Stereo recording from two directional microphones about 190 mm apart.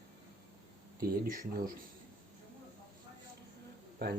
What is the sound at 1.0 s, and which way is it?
Speech, 50° right (ahead or behind).